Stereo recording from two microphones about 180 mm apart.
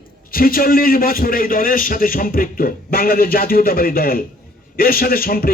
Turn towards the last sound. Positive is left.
turn(degrees=55)  # may be behind; listen again after turning